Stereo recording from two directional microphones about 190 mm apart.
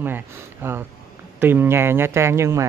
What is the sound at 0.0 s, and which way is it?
Speech, 10° right (ahead or behind).